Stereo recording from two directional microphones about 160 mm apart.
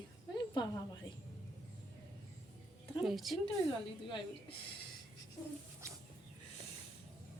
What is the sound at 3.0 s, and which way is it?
Speech, centre (ahead or behind).